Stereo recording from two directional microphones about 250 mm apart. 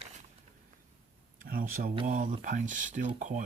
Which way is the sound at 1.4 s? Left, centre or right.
Right.